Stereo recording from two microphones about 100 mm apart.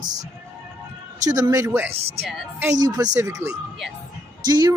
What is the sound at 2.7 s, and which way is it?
Speech, 40° right (ahead or behind).